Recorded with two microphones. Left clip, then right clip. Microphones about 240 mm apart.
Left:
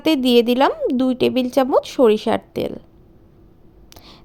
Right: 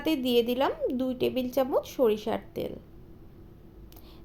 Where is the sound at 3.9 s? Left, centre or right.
Left.